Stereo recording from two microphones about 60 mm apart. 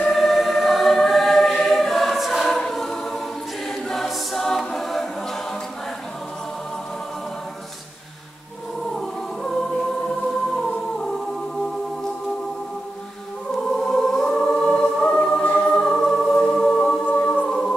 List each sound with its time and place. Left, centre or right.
0.1 s choir: centre
8.8 s music: centre
13.5 s choir: centre
15.6 s music: centre
17.0 s music: left
17.5 s music: centre